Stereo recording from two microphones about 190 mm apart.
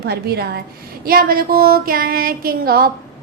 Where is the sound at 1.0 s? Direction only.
50° right (ahead or behind).